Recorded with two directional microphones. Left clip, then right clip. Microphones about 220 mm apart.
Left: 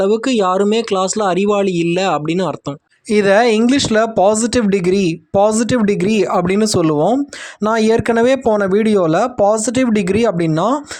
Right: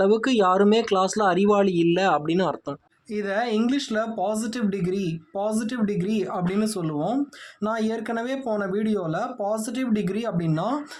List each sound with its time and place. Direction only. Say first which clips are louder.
0.0 s speech: left 5 dB; 20° left (ahead or behind)
3.1 s speech: left 14 dB; 40° left (ahead or behind)